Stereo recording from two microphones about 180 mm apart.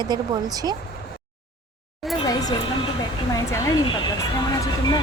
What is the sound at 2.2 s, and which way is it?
Music, 20° left (ahead or behind).